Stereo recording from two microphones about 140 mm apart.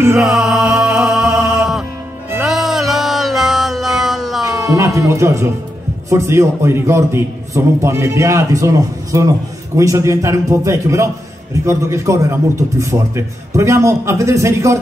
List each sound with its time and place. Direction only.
0.2 s music: centre (ahead or behind)
4.7 s a sound: 20° right (ahead or behind)
6.0 s a man's voice: 20° right (ahead or behind)